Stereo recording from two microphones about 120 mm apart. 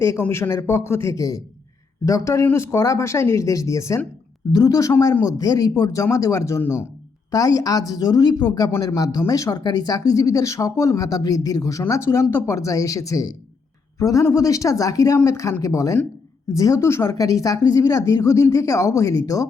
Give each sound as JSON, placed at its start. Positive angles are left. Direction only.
{"t": 0.0, "sound": "speech", "side_deg": 25}
{"t": 8.7, "sound": "speech", "side_deg": 20}
{"t": 9.1, "sound": "speech", "side_deg": 30}